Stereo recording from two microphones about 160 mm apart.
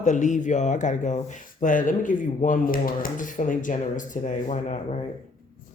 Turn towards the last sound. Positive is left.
turn(degrees=50)  # may be behind; listen again after turning